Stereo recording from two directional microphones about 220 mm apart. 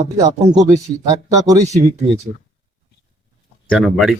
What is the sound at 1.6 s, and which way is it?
Speech, 30° right (ahead or behind).